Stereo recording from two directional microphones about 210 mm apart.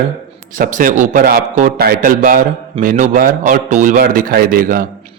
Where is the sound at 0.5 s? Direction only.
40° right (ahead or behind).